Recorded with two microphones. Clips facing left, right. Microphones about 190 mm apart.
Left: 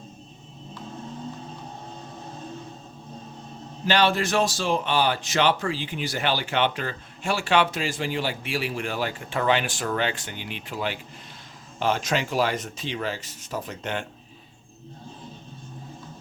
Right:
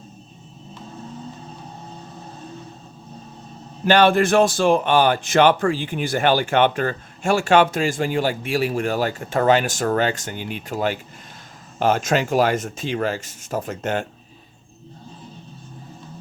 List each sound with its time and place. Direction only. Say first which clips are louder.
3.8 s speech: right 7 dB; 55° right (ahead or behind)